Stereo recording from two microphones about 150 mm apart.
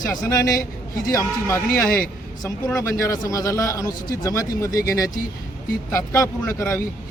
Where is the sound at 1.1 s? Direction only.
20° left (ahead or behind).